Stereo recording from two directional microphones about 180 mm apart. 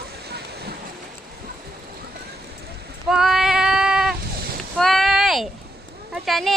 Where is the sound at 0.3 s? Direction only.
65° right (ahead or behind).